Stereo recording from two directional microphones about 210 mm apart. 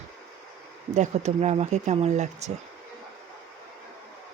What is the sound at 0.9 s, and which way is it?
Speech, 35° right (ahead or behind).